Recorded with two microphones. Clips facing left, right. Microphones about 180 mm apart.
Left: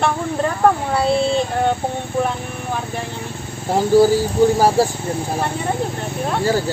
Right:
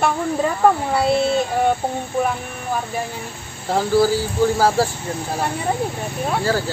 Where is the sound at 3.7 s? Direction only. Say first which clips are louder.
Left 4 dB; 15° left (ahead or behind).